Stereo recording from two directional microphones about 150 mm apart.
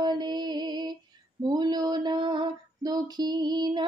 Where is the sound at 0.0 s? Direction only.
30° right (ahead or behind).